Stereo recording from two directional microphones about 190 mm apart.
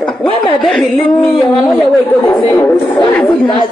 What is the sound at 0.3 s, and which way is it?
Chuckle, 25° left (ahead or behind).